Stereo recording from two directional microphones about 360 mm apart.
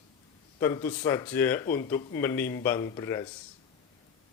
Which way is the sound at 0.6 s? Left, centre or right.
Centre.